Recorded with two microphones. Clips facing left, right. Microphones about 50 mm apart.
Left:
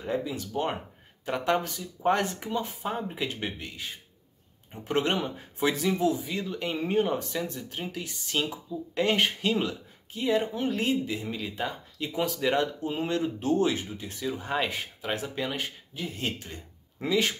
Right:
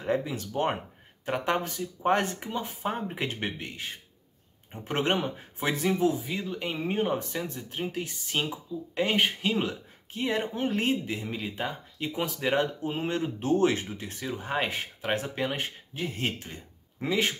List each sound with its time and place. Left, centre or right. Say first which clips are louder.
0.0 s speech: right 2 dB; right
1.2 s speech: left 1 dB; centre
2.7 s speech: right 1 dB; right
6.2 s speech: left 1 dB; centre
9.7 s speech: right 1 dB; right
11.2 s speech: even; centre
13.1 s speech: even; right
14.3 s speech: even; right
14.7 s speech: right 2 dB; right